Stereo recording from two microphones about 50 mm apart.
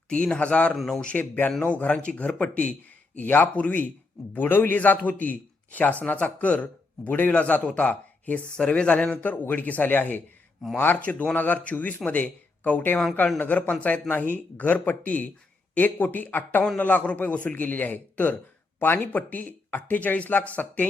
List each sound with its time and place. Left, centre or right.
0.1 s speech: left
0.9 s a man's voice: centre
1.6 s speech: left
3.2 s a man's voice: left
8.5 s speech: centre
9.2 s a man's voice: left